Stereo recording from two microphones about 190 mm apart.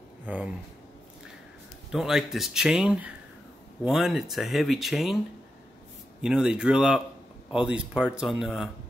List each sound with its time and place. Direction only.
0.3 s speech: 10° right (ahead or behind)
1.9 s speech: centre (ahead or behind)
6.2 s speech: 5° right (ahead or behind)